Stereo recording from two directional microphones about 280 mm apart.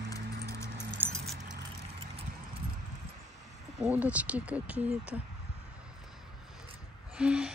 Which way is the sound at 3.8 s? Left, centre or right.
Centre.